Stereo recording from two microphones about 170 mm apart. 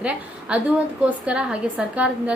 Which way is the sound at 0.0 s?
5° right (ahead or behind).